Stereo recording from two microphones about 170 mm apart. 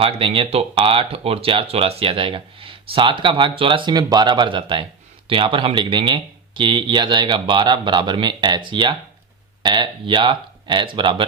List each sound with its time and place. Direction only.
0.0 s speech: 35° right (ahead or behind)